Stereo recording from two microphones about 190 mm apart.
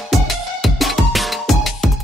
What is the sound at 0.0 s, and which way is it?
Music, centre (ahead or behind).